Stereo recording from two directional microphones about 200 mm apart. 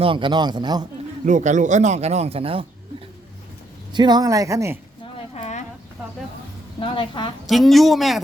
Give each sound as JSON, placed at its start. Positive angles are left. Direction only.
{"t": 0.0, "sound": "a man's voice", "side_deg": -25}
{"t": 1.2, "sound": "speech", "side_deg": -40}
{"t": 3.9, "sound": "speech", "side_deg": -20}
{"t": 5.3, "sound": "a sound", "side_deg": 35}
{"t": 6.7, "sound": "a woman's voice", "side_deg": 25}
{"t": 7.4, "sound": "speech", "side_deg": 0}